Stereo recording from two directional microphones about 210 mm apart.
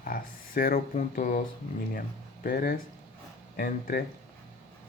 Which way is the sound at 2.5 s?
45° left (ahead or behind).